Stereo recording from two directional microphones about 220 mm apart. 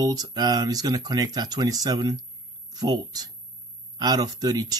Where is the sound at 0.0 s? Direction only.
15° right (ahead or behind).